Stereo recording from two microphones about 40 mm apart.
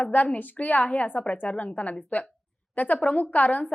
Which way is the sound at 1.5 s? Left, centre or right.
Left.